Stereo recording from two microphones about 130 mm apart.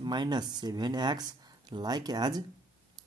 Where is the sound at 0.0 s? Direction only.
35° right (ahead or behind).